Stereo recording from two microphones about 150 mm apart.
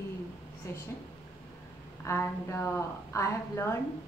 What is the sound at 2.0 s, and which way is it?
A woman's voice, 15° left (ahead or behind).